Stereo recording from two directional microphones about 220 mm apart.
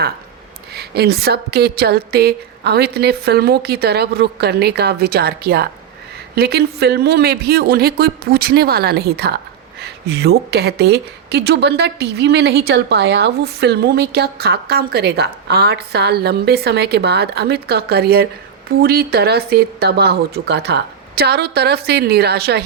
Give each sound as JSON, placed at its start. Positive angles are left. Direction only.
{"t": 0.7, "sound": "a woman's voice", "side_deg": -45}